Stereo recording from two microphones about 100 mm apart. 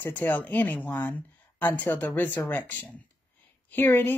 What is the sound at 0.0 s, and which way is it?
A woman's voice, 20° left (ahead or behind).